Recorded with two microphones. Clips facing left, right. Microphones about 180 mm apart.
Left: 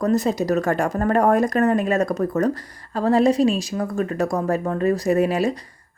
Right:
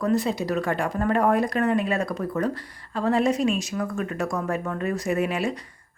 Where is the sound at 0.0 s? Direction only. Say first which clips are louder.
Left 4 dB; 40° left (ahead or behind).